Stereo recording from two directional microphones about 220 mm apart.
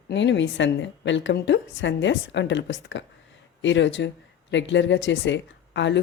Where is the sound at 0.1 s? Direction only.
55° left (ahead or behind).